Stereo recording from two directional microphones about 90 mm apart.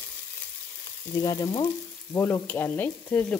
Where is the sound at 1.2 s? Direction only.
40° left (ahead or behind).